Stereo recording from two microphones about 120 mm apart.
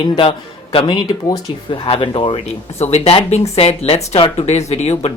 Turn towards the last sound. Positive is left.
turn(degrees=65)  # may be behind; listen again after turning